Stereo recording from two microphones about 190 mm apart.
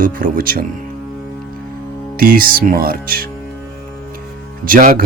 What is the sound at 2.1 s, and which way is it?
Speech, 50° right (ahead or behind).